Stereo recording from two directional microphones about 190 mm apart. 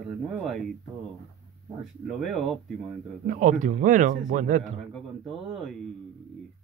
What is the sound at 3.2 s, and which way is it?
Speech, 40° right (ahead or behind).